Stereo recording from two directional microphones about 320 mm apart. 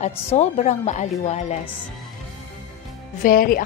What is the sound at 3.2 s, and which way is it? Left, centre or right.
Speech, left.